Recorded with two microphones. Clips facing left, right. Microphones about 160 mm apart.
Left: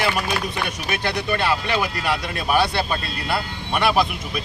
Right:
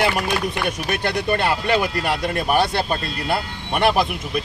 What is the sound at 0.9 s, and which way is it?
Speech, 50° right (ahead or behind).